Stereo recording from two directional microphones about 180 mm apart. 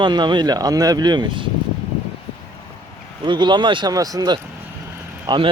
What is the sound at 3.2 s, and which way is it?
Speech, 25° right (ahead or behind).